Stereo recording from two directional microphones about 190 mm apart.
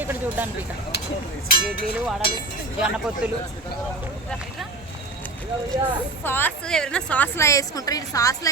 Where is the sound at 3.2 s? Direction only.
5° right (ahead or behind).